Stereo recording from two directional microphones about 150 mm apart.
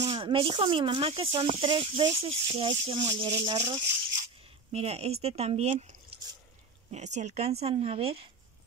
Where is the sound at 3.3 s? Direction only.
25° right (ahead or behind).